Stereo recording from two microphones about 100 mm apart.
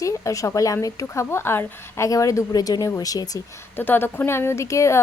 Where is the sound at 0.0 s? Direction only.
30° left (ahead or behind).